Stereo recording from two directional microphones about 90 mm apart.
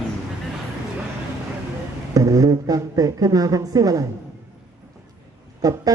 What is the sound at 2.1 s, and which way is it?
A woman's voice, 40° right (ahead or behind).